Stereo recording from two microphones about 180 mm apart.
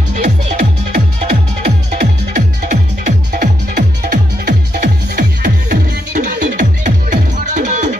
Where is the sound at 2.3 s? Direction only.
45° right (ahead or behind).